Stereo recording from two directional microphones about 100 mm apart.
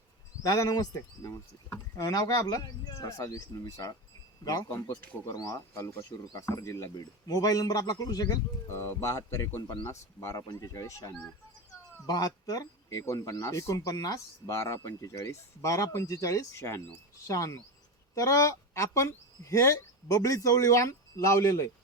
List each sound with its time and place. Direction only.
0.4 s speech: 35° left (ahead or behind)
8.7 s speech: 25° left (ahead or behind)